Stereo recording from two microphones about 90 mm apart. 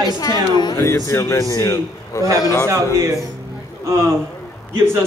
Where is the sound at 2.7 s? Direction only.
35° right (ahead or behind).